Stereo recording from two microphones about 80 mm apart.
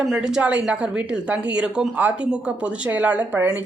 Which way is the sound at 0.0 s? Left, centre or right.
Centre.